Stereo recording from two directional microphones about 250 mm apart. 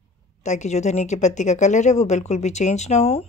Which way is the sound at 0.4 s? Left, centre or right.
Left.